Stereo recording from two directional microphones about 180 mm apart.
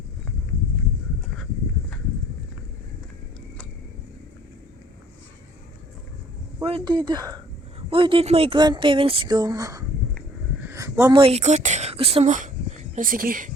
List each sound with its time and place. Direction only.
6.6 s speech: 30° right (ahead or behind)
10.6 s a sound: 15° right (ahead or behind)
11.1 s a woman's voice: 30° right (ahead or behind); by 13.5 s 50° right (ahead or behind)